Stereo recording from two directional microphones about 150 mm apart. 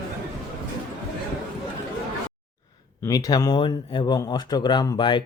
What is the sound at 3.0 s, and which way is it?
Speech, 25° left (ahead or behind).